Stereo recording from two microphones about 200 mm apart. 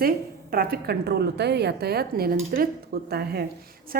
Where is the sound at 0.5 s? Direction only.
50° right (ahead or behind).